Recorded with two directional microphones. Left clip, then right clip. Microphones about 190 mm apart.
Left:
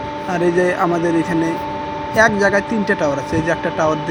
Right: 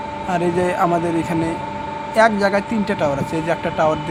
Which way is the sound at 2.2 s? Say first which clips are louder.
Left 1 dB; centre (ahead or behind).